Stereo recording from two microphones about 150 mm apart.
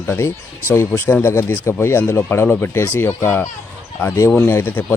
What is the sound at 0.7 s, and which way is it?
Speech, 15° left (ahead or behind).